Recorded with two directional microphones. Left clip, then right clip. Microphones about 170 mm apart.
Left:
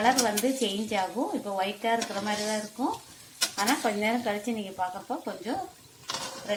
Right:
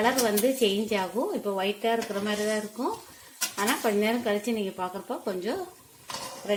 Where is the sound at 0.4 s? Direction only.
60° right (ahead or behind).